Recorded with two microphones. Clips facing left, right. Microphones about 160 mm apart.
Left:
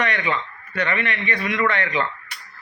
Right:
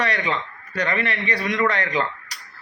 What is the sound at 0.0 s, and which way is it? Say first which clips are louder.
A man's voice: even; 35° right (ahead or behind).